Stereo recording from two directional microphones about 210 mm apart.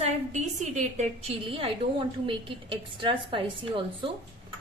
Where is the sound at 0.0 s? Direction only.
35° right (ahead or behind).